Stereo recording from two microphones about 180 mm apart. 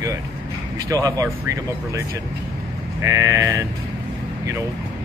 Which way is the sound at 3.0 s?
15° right (ahead or behind).